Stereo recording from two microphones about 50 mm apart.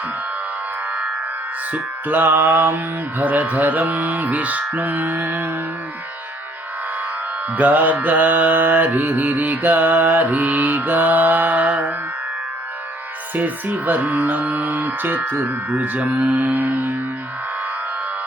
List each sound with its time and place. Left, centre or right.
1.7 s mantra: right
7.5 s mantra: right
13.3 s mantra: right
15.7 s mantra: right